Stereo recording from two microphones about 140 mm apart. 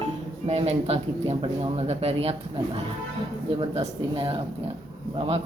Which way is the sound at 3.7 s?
45° right (ahead or behind).